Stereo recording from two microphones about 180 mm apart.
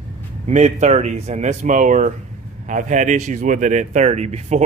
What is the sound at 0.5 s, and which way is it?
Speech, 40° right (ahead or behind).